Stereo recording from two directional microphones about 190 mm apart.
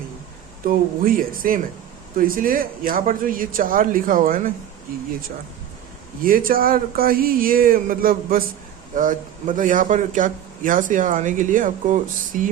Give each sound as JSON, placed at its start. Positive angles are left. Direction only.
{"t": 0.6, "sound": "speech", "side_deg": -50}
{"t": 6.2, "sound": "speech", "side_deg": -50}